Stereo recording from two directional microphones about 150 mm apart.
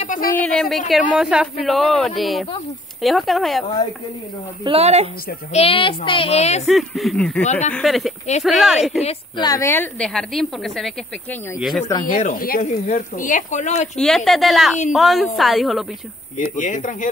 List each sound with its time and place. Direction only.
0.0 s a sound: 65° left (ahead or behind)
0.4 s speech: 5° left (ahead or behind)
4.6 s a woman's voice: 45° right (ahead or behind)
5.5 s a woman's voice: 40° left (ahead or behind)
6.7 s speech: centre (ahead or behind)
9.4 s a woman's voice: 25° left (ahead or behind)
9.9 s speech: 5° left (ahead or behind)
12.0 s speech: 60° left (ahead or behind)
13.9 s speech: 5° left (ahead or behind)
16.5 s speech: 55° left (ahead or behind)